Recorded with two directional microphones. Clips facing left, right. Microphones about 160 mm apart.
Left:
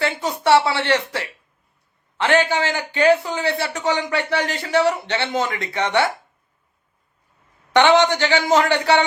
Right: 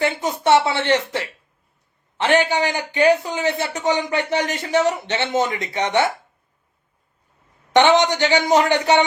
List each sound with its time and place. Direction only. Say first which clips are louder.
0.0 s a sound: right 1 dB; 20° right (ahead or behind)
0.4 s a man's voice: even; 20° right (ahead or behind)
7.7 s a man's voice: even; 20° right (ahead or behind)